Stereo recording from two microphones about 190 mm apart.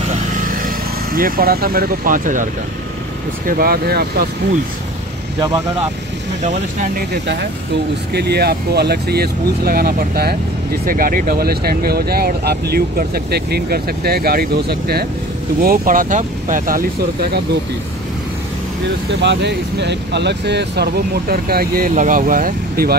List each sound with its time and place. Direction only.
0.1 s vehicle: 45° right (ahead or behind)
3.4 s speech: 50° right (ahead or behind)
6.4 s speech: 40° right (ahead or behind)
8.1 s speech: 60° right (ahead or behind)
19.0 s speech: 65° right (ahead or behind); by 22.9 s 50° right (ahead or behind)